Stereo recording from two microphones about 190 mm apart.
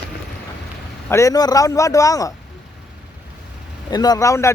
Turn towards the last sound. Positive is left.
turn(degrees=15)  # may be behind; listen again after turning